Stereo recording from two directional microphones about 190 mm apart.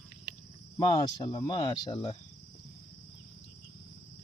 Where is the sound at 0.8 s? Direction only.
20° left (ahead or behind).